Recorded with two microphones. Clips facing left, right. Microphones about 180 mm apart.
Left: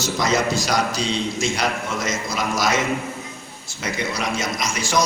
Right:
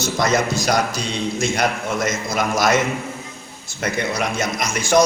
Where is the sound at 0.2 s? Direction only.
55° right (ahead or behind).